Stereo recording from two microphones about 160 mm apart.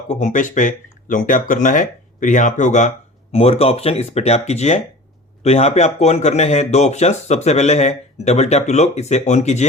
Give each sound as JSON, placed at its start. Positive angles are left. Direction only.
{"t": 0.1, "sound": "speech", "side_deg": 50}
{"t": 3.3, "sound": "speech", "side_deg": 40}